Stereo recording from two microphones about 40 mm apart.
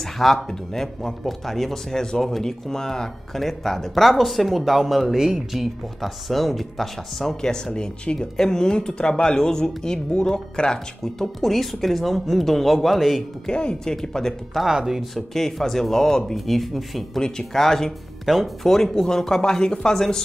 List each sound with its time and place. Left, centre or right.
0.0 s speech: centre
5.9 s speech: centre
11.4 s speech: centre
13.5 s speech: left
14.7 s speech: centre
15.3 s speech: centre
18.3 s speech: centre
18.7 s speech: centre